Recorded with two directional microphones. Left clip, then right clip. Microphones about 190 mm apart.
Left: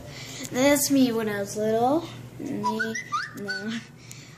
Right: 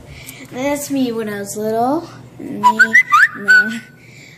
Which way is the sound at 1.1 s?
25° right (ahead or behind).